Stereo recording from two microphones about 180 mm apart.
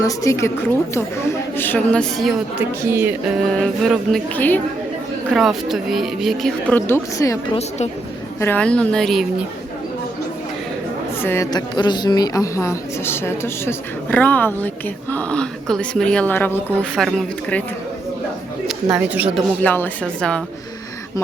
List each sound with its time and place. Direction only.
0.0 s a woman's voice: 15° left (ahead or behind)
1.5 s speech: 10° left (ahead or behind)
2.9 s speech: 10° right (ahead or behind)
3.5 s speech: centre (ahead or behind)
8.4 s speech: 10° left (ahead or behind)
11.2 s a woman's voice: 15° left (ahead or behind)
16.6 s speech: 10° right (ahead or behind)
17.0 s speech: centre (ahead or behind)
18.7 s speech: 5° right (ahead or behind)
19.6 s a woman's voice: 10° left (ahead or behind)